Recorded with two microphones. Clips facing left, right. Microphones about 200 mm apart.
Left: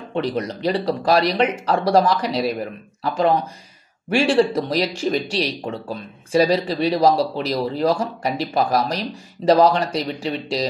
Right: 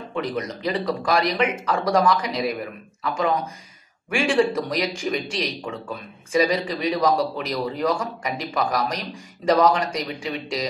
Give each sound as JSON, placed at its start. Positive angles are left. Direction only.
{"t": 0.1, "sound": "speech", "side_deg": 30}